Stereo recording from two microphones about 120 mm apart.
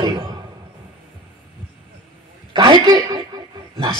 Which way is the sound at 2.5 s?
40° right (ahead or behind).